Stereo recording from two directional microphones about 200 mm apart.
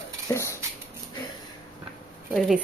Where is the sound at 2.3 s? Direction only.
Centre (ahead or behind).